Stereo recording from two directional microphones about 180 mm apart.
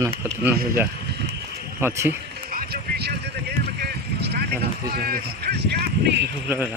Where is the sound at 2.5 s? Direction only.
60° right (ahead or behind).